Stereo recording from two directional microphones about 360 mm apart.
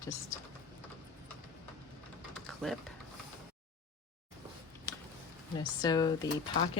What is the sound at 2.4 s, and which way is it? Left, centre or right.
Typing, centre.